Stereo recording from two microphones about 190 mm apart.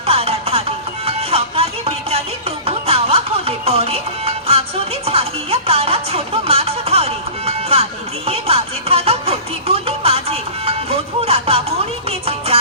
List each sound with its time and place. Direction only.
0.1 s music: 30° right (ahead or behind)